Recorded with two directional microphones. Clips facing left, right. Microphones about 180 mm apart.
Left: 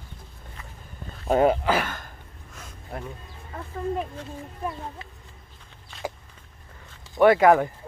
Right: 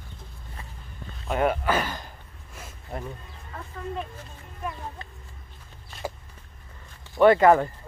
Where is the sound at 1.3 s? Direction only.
30° left (ahead or behind).